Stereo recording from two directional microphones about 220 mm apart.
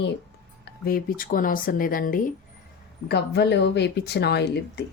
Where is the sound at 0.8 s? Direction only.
40° left (ahead or behind).